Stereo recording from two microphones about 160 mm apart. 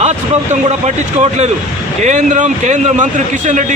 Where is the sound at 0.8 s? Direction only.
45° right (ahead or behind).